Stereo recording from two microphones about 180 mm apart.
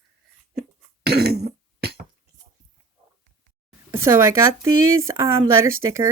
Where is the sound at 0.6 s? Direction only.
65° right (ahead or behind).